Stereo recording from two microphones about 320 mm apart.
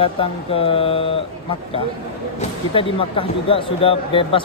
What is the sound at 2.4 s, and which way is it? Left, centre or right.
Speech, centre.